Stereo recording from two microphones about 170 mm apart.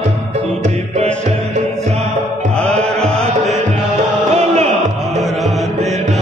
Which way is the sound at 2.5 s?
5° left (ahead or behind).